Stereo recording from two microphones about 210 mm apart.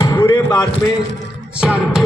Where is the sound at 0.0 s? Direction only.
15° left (ahead or behind).